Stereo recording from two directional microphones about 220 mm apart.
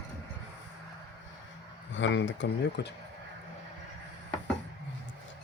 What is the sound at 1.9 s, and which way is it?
Speech, 55° left (ahead or behind).